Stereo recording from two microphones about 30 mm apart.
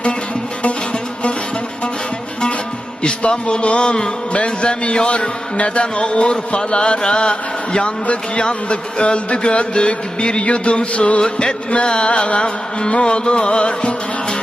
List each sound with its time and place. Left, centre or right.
3.0 s a man's voice: left
11.2 s speech: left
12.9 s music: left